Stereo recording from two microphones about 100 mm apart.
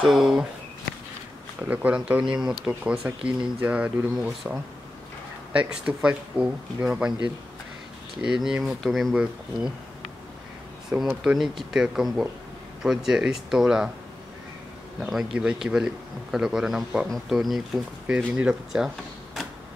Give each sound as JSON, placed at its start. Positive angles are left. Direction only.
{"t": 0.0, "sound": "a man's voice", "side_deg": 0}
{"t": 1.6, "sound": "speech", "side_deg": -15}
{"t": 5.5, "sound": "speech", "side_deg": -10}
{"t": 8.2, "sound": "a man's voice", "side_deg": -5}
{"t": 10.9, "sound": "speech", "side_deg": -15}
{"t": 11.3, "sound": "a man's voice", "side_deg": 0}
{"t": 15.0, "sound": "a man's voice", "side_deg": 0}